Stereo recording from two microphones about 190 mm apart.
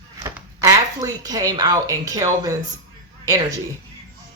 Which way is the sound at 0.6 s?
20° right (ahead or behind).